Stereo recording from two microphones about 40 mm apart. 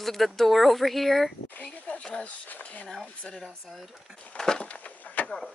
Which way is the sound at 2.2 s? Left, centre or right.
Left.